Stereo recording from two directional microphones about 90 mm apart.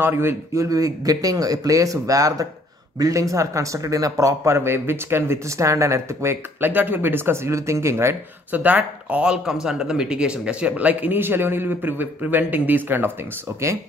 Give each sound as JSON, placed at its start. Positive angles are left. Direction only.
{"t": 0.0, "sound": "a man's voice", "side_deg": -25}
{"t": 0.7, "sound": "a man's voice", "side_deg": -40}